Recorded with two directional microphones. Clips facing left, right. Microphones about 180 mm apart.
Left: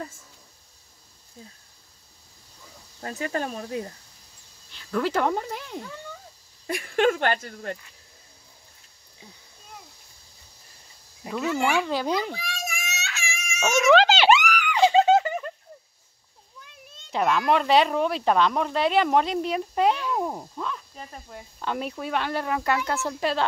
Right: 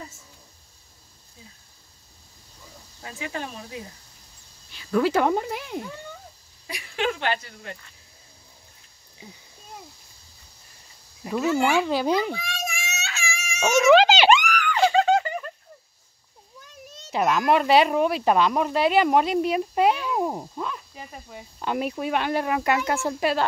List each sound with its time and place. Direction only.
3.0 s speech: 45° left (ahead or behind)
4.7 s speech: 10° right (ahead or behind)
6.7 s speech: 50° left (ahead or behind)
11.3 s speech: 20° right (ahead or behind)
11.7 s speech: 10° right (ahead or behind)
12.4 s baby cry: 25° right (ahead or behind)
13.6 s speech: 10° right (ahead or behind)
14.3 s a sound: 5° left (ahead or behind); by 15.2 s 20° left (ahead or behind)
16.6 s a sound: 40° right (ahead or behind)
17.1 s speech: 5° right (ahead or behind)